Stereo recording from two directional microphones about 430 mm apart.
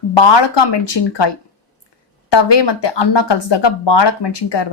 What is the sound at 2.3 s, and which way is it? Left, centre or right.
Speech, left.